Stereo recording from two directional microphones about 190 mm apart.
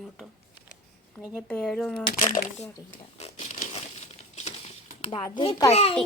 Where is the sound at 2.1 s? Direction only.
40° left (ahead or behind).